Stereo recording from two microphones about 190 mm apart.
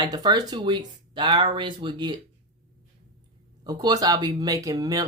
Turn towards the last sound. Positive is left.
turn(degrees=-20)  # may be behind; listen again after turning